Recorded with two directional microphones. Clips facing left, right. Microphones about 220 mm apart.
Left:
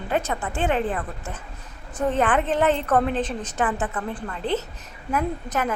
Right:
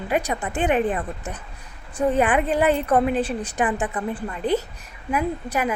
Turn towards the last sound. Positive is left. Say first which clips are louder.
# right 2 dB
turn(degrees=-10)  # may be behind; listen again after turning